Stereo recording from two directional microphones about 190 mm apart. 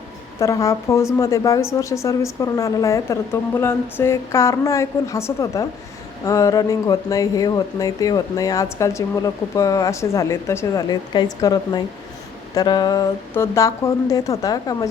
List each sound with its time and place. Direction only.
0.3 s speech: 15° left (ahead or behind)